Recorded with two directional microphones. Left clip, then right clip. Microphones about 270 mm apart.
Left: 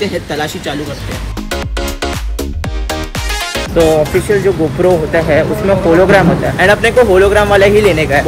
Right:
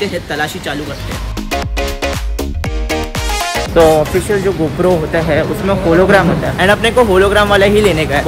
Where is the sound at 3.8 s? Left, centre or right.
Right.